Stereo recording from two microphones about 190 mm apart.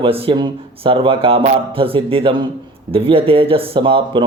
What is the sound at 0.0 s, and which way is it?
Speech, 30° right (ahead or behind).